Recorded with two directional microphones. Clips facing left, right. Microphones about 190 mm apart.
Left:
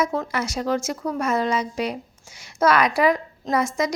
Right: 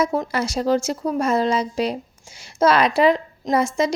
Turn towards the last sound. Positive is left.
turn(degrees=-25)  # may be behind; listen again after turning